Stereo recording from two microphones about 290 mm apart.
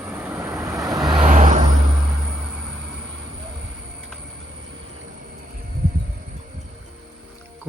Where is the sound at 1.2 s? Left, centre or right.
Right.